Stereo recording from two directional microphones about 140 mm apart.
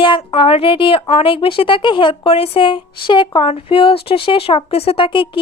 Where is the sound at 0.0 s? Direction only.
35° left (ahead or behind).